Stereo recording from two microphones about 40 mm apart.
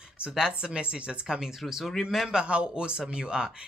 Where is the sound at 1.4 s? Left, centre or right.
Centre.